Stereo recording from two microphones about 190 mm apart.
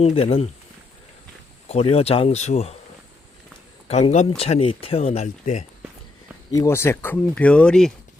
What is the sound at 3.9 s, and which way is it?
Speech, 35° left (ahead or behind).